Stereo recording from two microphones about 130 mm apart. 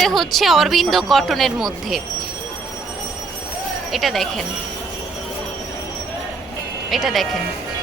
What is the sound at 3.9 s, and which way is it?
Speech, centre (ahead or behind).